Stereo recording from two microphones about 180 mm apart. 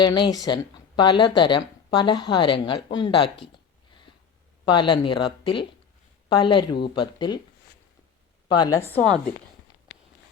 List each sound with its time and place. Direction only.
0.0 s speech: 25° left (ahead or behind)
4.6 s speech: 25° left (ahead or behind)
8.4 s speech: 25° left (ahead or behind)
8.9 s a woman's voice: 5° left (ahead or behind)